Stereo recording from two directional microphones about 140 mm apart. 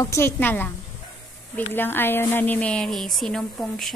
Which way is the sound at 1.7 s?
15° left (ahead or behind).